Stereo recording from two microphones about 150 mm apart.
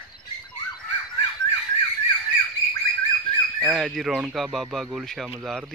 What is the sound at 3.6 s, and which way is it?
Speech, 10° right (ahead or behind).